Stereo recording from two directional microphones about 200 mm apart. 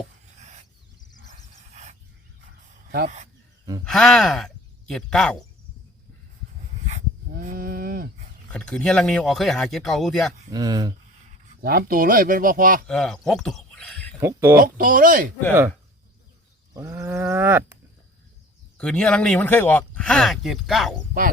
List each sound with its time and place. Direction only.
0.3 s a sound: 35° right (ahead or behind)
3.8 s speech: centre (ahead or behind)
6.8 s a sound: 35° right (ahead or behind)
8.4 s speech: 5° left (ahead or behind)
10.5 s speech: 20° right (ahead or behind)
11.6 s speech: 50° right (ahead or behind)
12.9 s speech: 5° left (ahead or behind)
14.2 s wild animals: 10° right (ahead or behind)
14.6 s speech: 45° right (ahead or behind)
16.7 s wild animals: 15° right (ahead or behind)
18.8 s speech: 5° left (ahead or behind)